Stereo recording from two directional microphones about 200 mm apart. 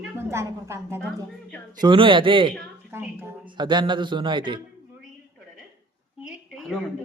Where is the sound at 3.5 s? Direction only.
20° right (ahead or behind).